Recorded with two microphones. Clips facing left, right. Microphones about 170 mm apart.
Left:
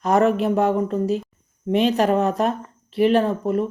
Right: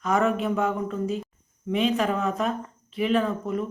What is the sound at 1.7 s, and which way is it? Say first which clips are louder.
Speech: left 6 dB; 75° left (ahead or behind).